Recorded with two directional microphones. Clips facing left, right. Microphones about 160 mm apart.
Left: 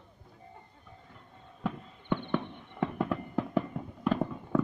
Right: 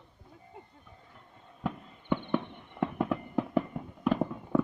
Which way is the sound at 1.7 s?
10° right (ahead or behind).